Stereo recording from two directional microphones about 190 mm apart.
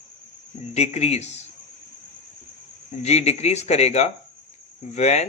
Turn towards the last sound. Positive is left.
turn(degrees=35)  # may be behind; listen again after turning